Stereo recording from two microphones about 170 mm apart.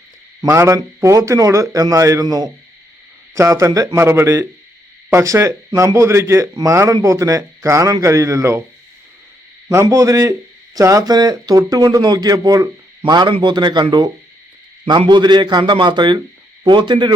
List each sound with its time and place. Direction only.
0.4 s speech: 15° right (ahead or behind)
9.6 s speech: 20° right (ahead or behind)